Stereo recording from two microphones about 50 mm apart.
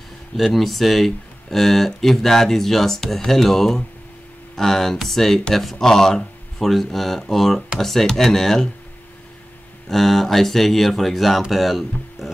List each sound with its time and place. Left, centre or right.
0.4 s speech: centre
9.8 s speech: centre